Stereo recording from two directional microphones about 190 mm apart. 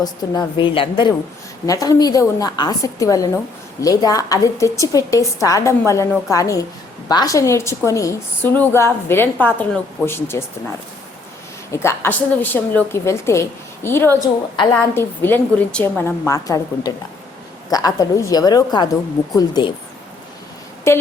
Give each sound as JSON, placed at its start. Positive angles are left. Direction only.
{"t": 0.0, "sound": "a woman's voice", "side_deg": 25}
{"t": 11.7, "sound": "a woman's voice", "side_deg": 15}
{"t": 20.9, "sound": "a woman's voice", "side_deg": 15}